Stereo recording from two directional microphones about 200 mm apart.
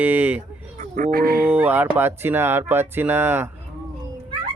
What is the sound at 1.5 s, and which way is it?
Speech, 10° right (ahead or behind).